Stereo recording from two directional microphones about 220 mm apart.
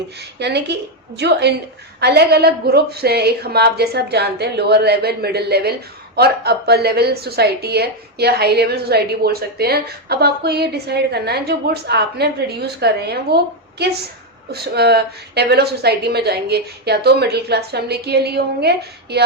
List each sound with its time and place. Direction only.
0.3 s a woman's voice: 50° right (ahead or behind)